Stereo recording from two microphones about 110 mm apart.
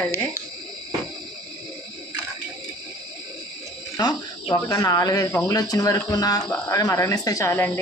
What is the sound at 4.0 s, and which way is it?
Speech, 40° left (ahead or behind).